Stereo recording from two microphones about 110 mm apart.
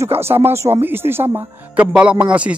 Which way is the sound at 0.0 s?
20° right (ahead or behind).